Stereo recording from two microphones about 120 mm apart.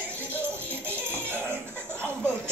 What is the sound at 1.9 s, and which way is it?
Chuckle, 20° right (ahead or behind).